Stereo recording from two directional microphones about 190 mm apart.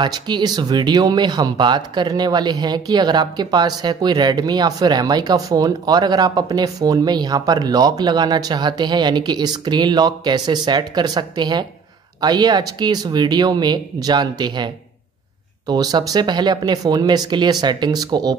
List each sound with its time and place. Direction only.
0.0 s speech: 20° right (ahead or behind)